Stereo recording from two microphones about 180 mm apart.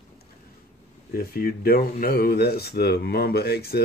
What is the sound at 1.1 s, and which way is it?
Speech, 55° left (ahead or behind).